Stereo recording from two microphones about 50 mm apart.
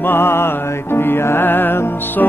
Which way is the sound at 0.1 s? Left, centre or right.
Left.